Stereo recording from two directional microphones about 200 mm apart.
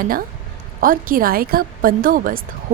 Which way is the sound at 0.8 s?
45° right (ahead or behind).